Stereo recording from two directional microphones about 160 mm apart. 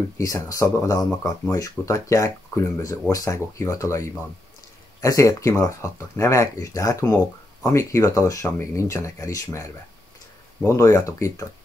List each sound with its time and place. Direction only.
0.2 s speech: 20° left (ahead or behind)